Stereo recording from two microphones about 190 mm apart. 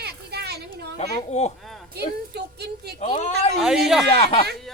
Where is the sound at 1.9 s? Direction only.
60° right (ahead or behind).